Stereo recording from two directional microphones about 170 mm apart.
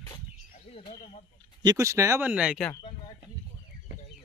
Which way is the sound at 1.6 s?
20° right (ahead or behind).